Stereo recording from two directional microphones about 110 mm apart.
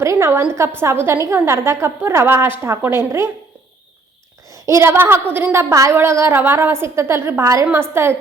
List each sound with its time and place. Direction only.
0.0 s a woman's voice: 25° right (ahead or behind)
4.6 s a woman's voice: 25° right (ahead or behind)